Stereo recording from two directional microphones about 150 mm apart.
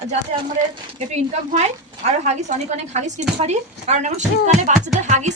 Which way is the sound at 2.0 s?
45° right (ahead or behind).